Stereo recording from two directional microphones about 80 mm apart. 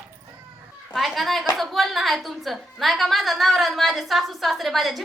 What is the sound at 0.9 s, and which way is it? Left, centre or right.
A woman's voice, centre.